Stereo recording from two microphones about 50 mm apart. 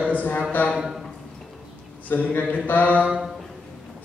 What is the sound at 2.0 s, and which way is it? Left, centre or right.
Speech, left.